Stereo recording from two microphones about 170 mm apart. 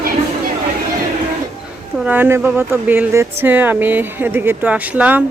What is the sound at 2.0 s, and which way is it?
Speech, 10° right (ahead or behind).